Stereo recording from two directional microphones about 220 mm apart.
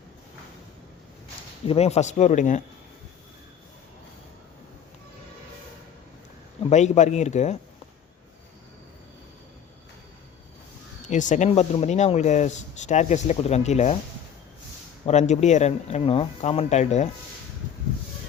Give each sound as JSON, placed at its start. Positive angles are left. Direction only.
{"t": 1.6, "sound": "speech", "side_deg": 30}
{"t": 6.7, "sound": "speech", "side_deg": 30}
{"t": 11.0, "sound": "speech", "side_deg": 35}
{"t": 15.0, "sound": "speech", "side_deg": 30}